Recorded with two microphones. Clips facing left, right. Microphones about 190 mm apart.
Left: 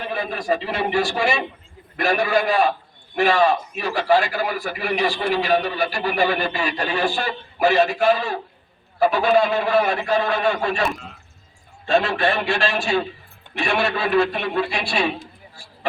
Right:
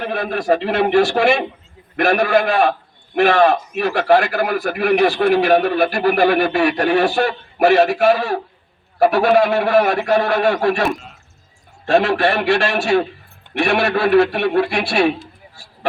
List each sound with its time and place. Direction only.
0.0 s a man's voice: 60° right (ahead or behind)